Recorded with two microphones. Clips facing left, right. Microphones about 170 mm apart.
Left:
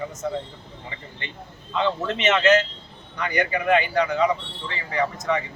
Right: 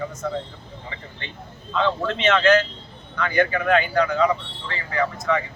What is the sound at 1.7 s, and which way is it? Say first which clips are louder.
Speech: right 1 dB; 15° left (ahead or behind).